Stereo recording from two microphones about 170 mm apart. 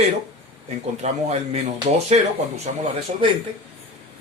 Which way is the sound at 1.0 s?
40° right (ahead or behind).